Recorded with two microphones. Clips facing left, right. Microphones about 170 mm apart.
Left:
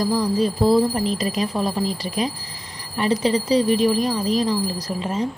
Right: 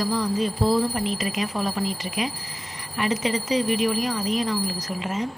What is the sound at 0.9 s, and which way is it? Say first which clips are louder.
A woman's voice: left 4 dB; 35° left (ahead or behind).